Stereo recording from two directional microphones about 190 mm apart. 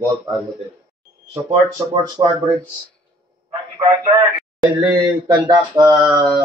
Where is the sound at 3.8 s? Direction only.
25° right (ahead or behind).